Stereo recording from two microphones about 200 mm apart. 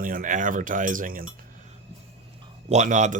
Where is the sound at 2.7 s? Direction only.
35° right (ahead or behind).